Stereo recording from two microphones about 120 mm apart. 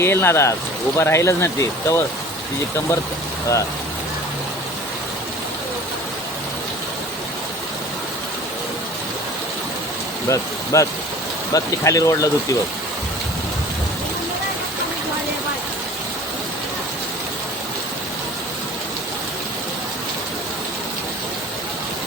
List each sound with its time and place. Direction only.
0.0 s speech: 20° left (ahead or behind)
10.2 s speech: 25° left (ahead or behind)